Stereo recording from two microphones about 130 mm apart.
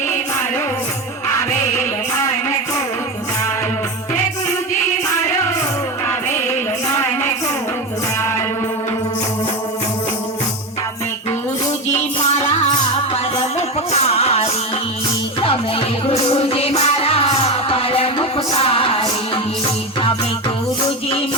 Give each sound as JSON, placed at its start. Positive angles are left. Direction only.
{"t": 11.9, "sound": "music", "side_deg": 60}